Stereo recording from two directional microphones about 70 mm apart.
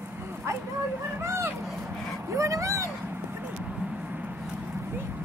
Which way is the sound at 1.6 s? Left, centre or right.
Centre.